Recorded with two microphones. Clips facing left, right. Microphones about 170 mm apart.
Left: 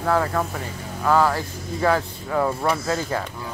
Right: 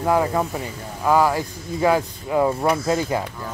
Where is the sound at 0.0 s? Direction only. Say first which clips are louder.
Right 2 dB; 15° right (ahead or behind).